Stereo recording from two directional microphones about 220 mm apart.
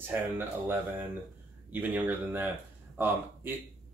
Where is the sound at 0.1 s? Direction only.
10° right (ahead or behind).